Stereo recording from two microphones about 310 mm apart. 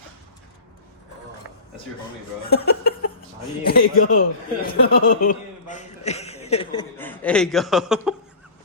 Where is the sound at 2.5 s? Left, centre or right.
Left.